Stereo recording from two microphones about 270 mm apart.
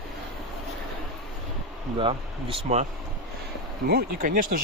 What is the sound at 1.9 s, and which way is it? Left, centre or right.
Speech, centre.